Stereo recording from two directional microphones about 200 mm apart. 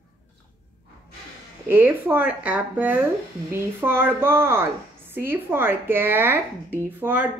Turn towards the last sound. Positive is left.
turn(degrees=-10)  # may be behind; listen again after turning